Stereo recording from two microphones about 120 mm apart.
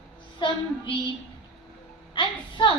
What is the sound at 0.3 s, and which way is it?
Speech, 45° left (ahead or behind).